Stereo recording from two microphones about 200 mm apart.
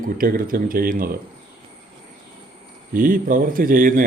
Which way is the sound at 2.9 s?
45° right (ahead or behind).